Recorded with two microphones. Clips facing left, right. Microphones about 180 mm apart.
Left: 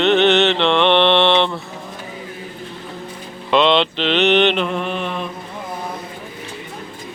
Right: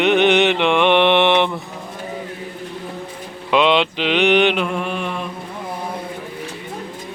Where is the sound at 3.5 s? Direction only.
10° right (ahead or behind).